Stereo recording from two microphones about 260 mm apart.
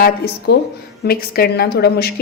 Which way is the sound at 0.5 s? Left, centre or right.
Left.